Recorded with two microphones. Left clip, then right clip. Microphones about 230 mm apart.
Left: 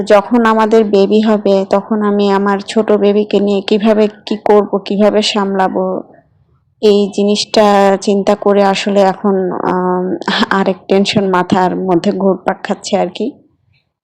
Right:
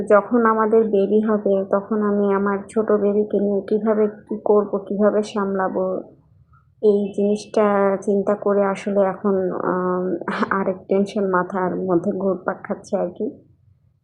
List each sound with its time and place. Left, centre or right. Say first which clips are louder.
0.1 s speech: left 6 dB; left
12.1 s speech: left 9 dB; left